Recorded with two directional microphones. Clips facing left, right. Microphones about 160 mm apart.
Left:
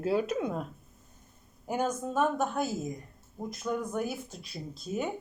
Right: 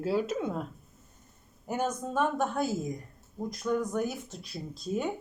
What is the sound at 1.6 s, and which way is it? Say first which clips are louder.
Speech: left 1 dB; 10° left (ahead or behind).